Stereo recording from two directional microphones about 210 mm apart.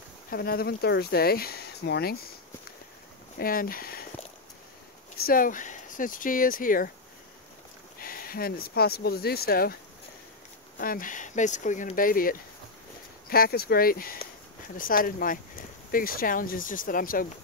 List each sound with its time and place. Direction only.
0.3 s speech: 45° left (ahead or behind)
3.3 s speech: 45° left (ahead or behind)
5.2 s speech: 40° left (ahead or behind)
8.0 s speech: 45° left (ahead or behind)
10.8 s speech: 40° left (ahead or behind)